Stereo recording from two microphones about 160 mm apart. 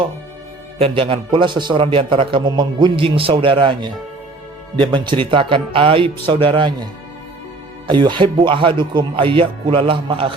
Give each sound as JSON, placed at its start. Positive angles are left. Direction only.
{"t": 0.8, "sound": "a man's voice", "side_deg": -35}
{"t": 7.9, "sound": "a man's voice", "side_deg": -30}